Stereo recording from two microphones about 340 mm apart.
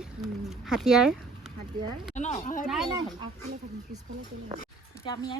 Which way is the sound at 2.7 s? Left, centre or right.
Centre.